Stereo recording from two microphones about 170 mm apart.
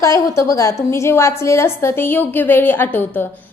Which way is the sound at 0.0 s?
20° left (ahead or behind).